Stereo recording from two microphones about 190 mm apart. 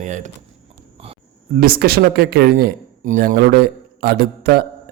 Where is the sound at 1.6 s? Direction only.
50° right (ahead or behind).